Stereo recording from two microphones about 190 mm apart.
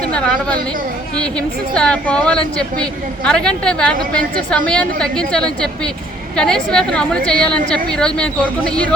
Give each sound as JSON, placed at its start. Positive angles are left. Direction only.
{"t": 0.0, "sound": "a woman's voice", "side_deg": 5}